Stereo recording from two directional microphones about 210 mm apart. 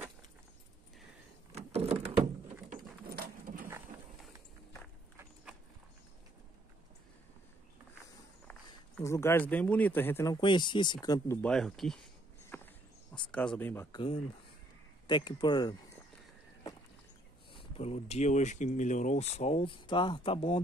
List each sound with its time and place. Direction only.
1.5 s power windows: 30° right (ahead or behind)
3.2 s clip-clop: 40° right (ahead or behind)
8.5 s speech: 10° left (ahead or behind)
11.4 s speech: centre (ahead or behind)
12.4 s a sound: 10° left (ahead or behind)
13.3 s speech: 5° left (ahead or behind)
13.9 s speech: 25° left (ahead or behind)
17.5 s speech: 25° left (ahead or behind)